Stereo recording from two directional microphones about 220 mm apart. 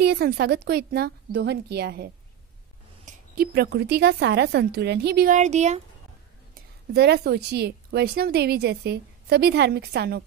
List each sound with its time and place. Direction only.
0.0 s a woman's voice: 45° right (ahead or behind)
3.1 s a woman's voice: 45° right (ahead or behind)
6.5 s a woman's voice: 45° right (ahead or behind)